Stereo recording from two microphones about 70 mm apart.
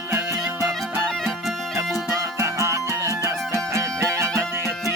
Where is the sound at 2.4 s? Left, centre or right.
Right.